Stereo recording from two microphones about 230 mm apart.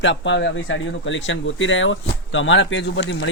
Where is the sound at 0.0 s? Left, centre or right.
Left.